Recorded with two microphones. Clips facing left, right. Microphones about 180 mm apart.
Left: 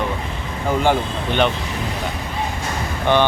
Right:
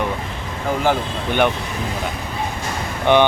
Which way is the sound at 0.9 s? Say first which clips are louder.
Right 1 dB; 10° right (ahead or behind).